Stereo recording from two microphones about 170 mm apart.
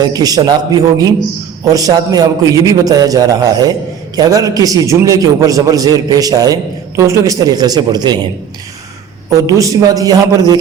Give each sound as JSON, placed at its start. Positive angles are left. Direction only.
{"t": 0.0, "sound": "a man's voice", "side_deg": -20}
{"t": 9.3, "sound": "a man's voice", "side_deg": -20}